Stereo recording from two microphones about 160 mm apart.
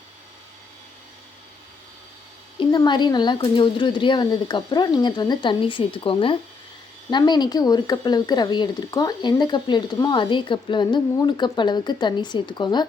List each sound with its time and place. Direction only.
2.6 s speech: 30° left (ahead or behind)